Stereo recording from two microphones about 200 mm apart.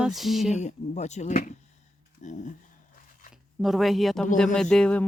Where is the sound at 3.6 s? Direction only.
Centre (ahead or behind).